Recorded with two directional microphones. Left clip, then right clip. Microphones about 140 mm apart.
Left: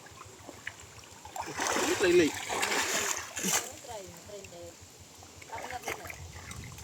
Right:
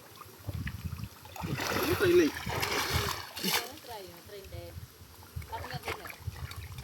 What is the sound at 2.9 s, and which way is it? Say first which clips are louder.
Splash: left 1 dB; 30° left (ahead or behind).